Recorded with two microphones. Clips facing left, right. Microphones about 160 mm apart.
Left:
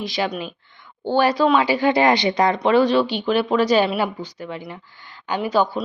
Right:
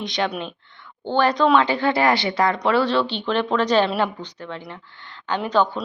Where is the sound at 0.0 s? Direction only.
5° left (ahead or behind).